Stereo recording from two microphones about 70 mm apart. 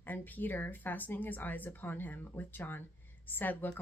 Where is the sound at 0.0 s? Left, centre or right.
Left.